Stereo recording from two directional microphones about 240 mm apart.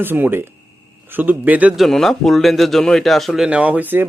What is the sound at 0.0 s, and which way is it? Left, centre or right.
A man's voice, centre.